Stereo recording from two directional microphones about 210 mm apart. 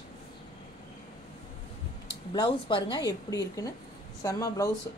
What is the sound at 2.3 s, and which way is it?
Speech, 20° left (ahead or behind).